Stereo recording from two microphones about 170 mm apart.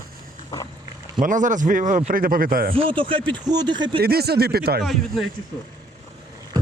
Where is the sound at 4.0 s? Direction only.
65° right (ahead or behind).